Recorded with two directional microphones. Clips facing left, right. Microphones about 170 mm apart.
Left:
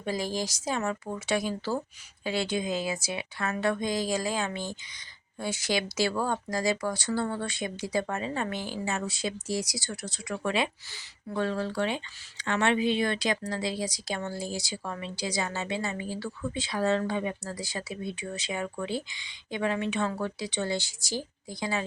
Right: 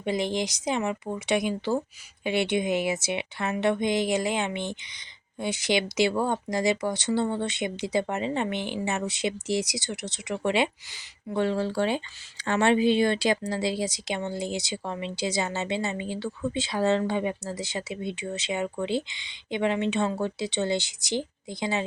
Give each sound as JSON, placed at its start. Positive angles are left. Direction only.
{"t": 0.0, "sound": "a woman's voice", "side_deg": -20}